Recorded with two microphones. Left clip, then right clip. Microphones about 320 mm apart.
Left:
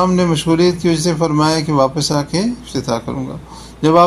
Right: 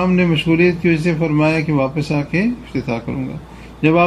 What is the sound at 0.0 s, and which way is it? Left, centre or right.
A man's voice, left.